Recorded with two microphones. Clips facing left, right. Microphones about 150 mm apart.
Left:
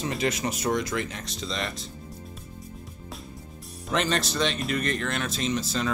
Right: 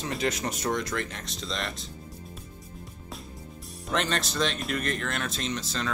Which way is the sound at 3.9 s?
Centre (ahead or behind).